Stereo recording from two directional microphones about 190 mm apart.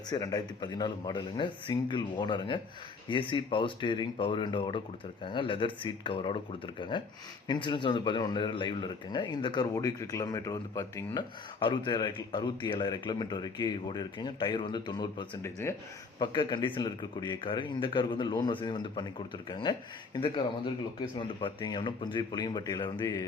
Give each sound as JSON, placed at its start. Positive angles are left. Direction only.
{"t": 0.1, "sound": "a man's voice", "side_deg": 20}
{"t": 16.1, "sound": "a man's voice", "side_deg": 25}